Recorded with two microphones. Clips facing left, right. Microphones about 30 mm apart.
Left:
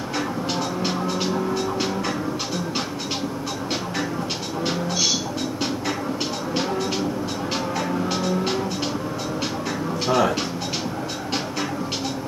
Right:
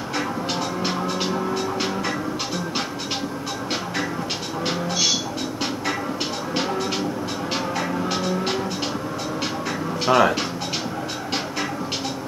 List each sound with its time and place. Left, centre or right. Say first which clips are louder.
0.1 s vehicle: right 1 dB; centre
4.6 s music: right 1 dB; centre
6.5 s music: even; centre
10.0 s speech: right 3 dB; centre